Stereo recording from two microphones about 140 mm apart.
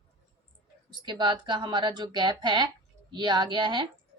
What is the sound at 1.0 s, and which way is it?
A woman's voice, 35° right (ahead or behind).